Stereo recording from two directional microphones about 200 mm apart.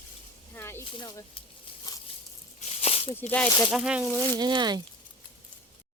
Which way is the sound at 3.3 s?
10° left (ahead or behind).